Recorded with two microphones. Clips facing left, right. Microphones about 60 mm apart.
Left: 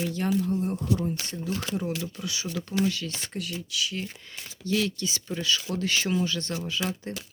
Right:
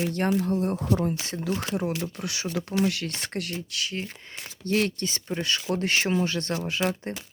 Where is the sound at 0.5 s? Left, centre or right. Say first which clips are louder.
Right 2 dB; right.